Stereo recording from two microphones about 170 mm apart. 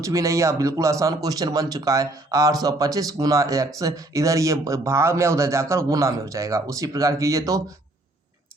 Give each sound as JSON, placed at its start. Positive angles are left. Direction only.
{"t": 0.0, "sound": "speech", "side_deg": -20}